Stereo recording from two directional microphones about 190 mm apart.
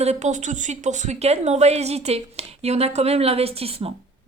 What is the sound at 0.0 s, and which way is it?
A woman's voice, 35° right (ahead or behind).